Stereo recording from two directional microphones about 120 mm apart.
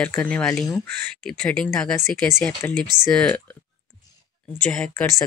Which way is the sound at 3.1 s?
10° left (ahead or behind).